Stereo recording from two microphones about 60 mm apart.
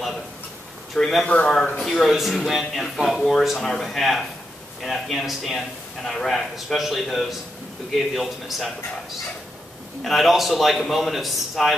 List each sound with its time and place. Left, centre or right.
0.9 s a man's voice: centre
1.2 s speech: centre
1.8 s a man's voice: centre
10.0 s a man's voice: centre